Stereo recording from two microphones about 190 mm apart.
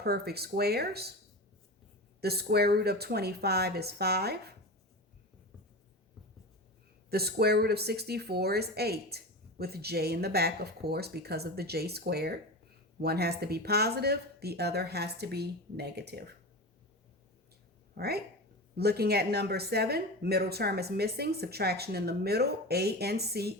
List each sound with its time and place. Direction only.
0.0 s speech: 55° right (ahead or behind)
2.2 s speech: 55° right (ahead or behind)
7.1 s speech: 55° right (ahead or behind)
17.9 s speech: 55° right (ahead or behind)